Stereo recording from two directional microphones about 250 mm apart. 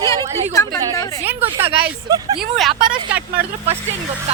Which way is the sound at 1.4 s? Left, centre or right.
Right.